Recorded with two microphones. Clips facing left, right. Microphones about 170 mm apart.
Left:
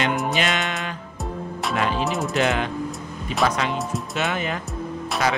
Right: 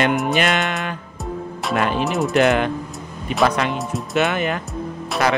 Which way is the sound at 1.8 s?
55° right (ahead or behind).